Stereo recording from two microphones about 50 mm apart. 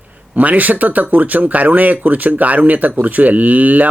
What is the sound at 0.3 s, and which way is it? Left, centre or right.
Speech, right.